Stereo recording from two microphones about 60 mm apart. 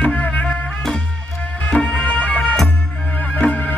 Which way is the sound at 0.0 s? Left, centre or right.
Left.